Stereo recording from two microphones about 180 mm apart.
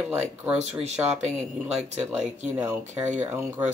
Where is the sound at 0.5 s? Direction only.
40° right (ahead or behind).